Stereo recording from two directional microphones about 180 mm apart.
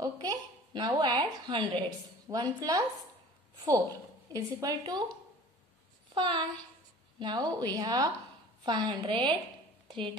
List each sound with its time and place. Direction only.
0.0 s a woman's voice: 20° right (ahead or behind)
6.1 s a woman's voice: 25° right (ahead or behind)